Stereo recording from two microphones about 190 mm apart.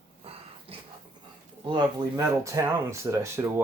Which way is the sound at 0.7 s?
30° right (ahead or behind).